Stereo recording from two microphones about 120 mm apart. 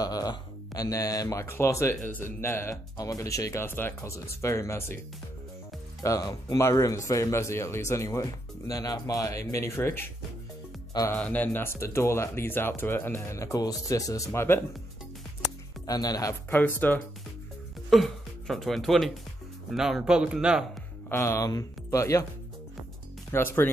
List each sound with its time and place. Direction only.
0.0 s speech: 30° left (ahead or behind)
3.6 s speech: 15° left (ahead or behind)
6.0 s speech: 30° left (ahead or behind)
11.1 s speech: 10° left (ahead or behind)
15.9 s speech: 30° left (ahead or behind)
16.5 s speech: 15° left (ahead or behind)
17.8 s speech: centre (ahead or behind)
21.1 s speech: 20° left (ahead or behind)
23.3 s speech: 20° left (ahead or behind)